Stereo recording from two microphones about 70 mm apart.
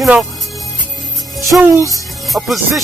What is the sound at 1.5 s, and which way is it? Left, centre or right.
Speech, centre.